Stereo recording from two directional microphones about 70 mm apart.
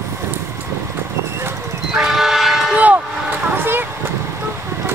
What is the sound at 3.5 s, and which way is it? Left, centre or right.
Vehicle, right.